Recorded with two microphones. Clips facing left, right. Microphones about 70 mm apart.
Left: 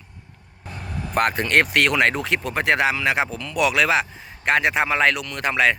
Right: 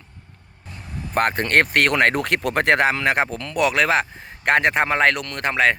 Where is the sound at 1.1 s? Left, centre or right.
Right.